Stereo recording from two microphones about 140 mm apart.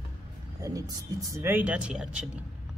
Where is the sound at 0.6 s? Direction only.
25° right (ahead or behind).